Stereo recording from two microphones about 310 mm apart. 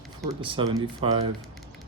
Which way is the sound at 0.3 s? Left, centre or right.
Centre.